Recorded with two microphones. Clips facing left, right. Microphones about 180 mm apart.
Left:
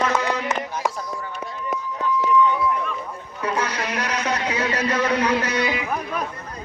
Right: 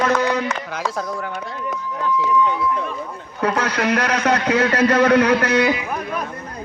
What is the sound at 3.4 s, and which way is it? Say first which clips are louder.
A man's voice: right 5 dB; 70° right (ahead or behind).